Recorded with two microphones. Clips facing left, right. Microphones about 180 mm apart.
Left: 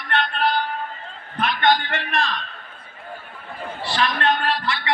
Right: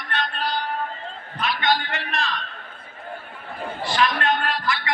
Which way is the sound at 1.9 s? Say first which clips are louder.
Left 3 dB; 50° left (ahead or behind).